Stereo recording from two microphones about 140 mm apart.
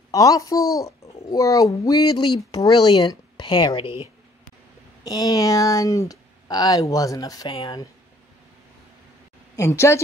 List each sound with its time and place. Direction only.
0.1 s a child's voice: 25° left (ahead or behind)
5.0 s a child's voice: 25° left (ahead or behind)
9.6 s a child's voice: 20° left (ahead or behind)